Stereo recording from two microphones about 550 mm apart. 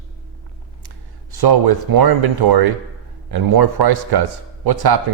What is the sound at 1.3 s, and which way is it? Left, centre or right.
A man's voice, right.